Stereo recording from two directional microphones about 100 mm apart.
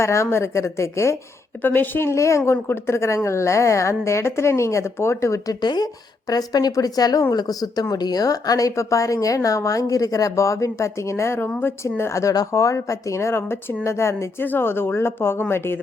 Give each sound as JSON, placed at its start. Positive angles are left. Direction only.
{"t": 0.0, "sound": "a woman's voice", "side_deg": 30}
{"t": 5.5, "sound": "speech", "side_deg": 45}
{"t": 11.4, "sound": "speech", "side_deg": 15}
{"t": 11.8, "sound": "a woman's voice", "side_deg": 25}